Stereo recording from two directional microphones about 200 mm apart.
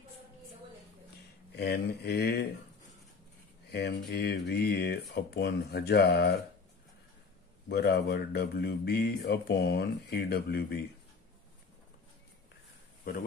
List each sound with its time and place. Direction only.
1.6 s speech: 55° left (ahead or behind)
3.7 s speech: 55° left (ahead or behind)
7.6 s speech: 55° left (ahead or behind)